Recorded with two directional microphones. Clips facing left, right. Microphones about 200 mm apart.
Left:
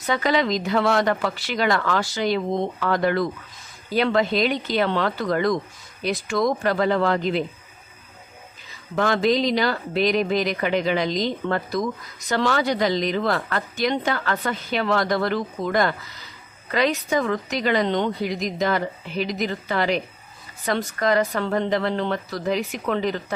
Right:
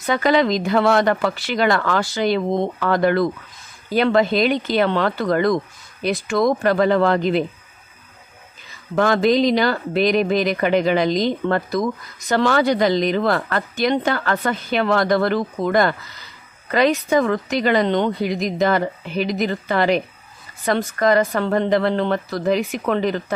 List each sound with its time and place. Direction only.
0.1 s a woman's voice: 55° right (ahead or behind)
8.9 s a woman's voice: 50° right (ahead or behind)